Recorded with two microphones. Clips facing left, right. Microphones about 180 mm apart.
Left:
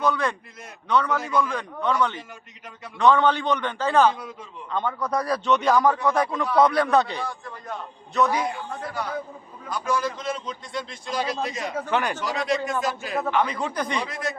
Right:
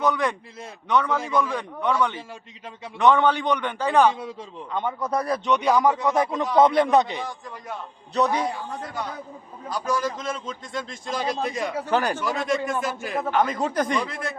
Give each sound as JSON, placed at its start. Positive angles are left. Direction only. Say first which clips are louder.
{"t": 0.0, "sound": "a man's voice", "louder": "right 1 dB", "side_deg": -15}
{"t": 5.5, "sound": "a man's voice", "louder": "even", "side_deg": -15}
{"t": 8.1, "sound": "a man's voice", "louder": "even", "side_deg": -35}
{"t": 9.6, "sound": "a man's voice", "louder": "even", "side_deg": -40}
{"t": 11.9, "sound": "a man's voice", "louder": "right 2 dB", "side_deg": -40}
{"t": 12.2, "sound": "a man's voice", "louder": "right 1 dB", "side_deg": -50}